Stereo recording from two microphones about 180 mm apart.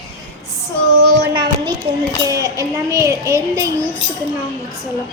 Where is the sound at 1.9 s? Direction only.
35° right (ahead or behind).